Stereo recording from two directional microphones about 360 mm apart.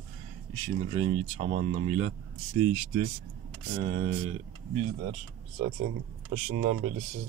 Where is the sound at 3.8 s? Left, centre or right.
Right.